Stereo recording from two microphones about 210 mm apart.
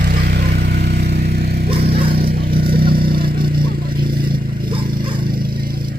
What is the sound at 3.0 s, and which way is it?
Vehicle, 45° right (ahead or behind).